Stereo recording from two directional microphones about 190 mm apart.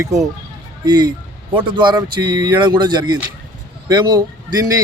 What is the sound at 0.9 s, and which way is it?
Speech, 25° right (ahead or behind).